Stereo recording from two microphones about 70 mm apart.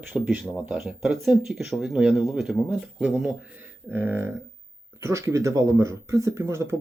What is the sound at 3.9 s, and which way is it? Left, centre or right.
Speech, right.